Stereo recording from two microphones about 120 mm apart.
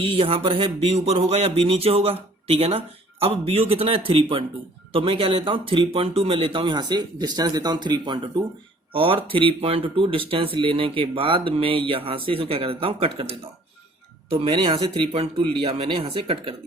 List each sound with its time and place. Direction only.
0.0 s speech: 50° right (ahead or behind)
6.7 s speech: 35° right (ahead or behind); by 14.6 s 55° right (ahead or behind)
14.6 s speech: 40° right (ahead or behind)
15.1 s speech: 55° right (ahead or behind)